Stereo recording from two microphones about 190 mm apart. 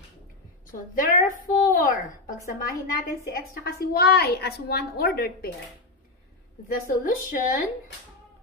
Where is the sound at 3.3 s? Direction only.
50° left (ahead or behind).